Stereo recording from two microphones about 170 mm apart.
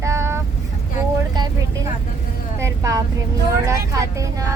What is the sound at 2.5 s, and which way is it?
Speech, 20° right (ahead or behind).